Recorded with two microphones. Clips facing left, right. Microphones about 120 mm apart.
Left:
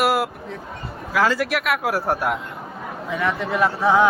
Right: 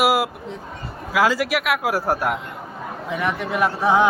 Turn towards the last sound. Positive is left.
turn(degrees=-15)  # may be behind; listen again after turning